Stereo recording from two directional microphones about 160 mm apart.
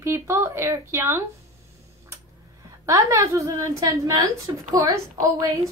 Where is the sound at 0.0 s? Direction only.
15° right (ahead or behind).